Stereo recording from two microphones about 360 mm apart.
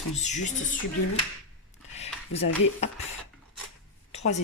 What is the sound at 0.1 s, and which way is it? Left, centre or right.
Speech, centre.